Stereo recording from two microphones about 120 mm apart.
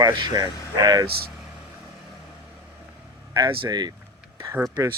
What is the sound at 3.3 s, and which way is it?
Speech, 35° right (ahead or behind).